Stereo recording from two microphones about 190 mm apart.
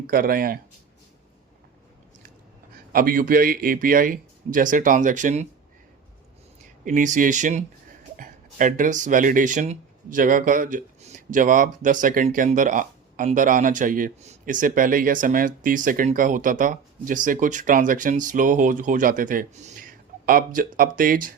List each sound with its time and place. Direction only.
0.1 s speech: 50° right (ahead or behind)
2.9 s speech: 50° right (ahead or behind)
6.8 s speech: 40° right (ahead or behind)